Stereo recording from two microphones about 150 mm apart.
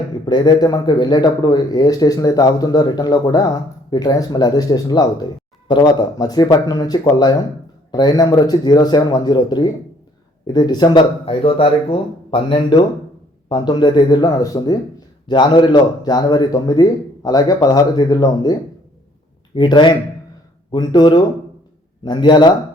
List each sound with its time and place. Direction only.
0.3 s speech: 30° left (ahead or behind)
19.5 s speech: 30° left (ahead or behind)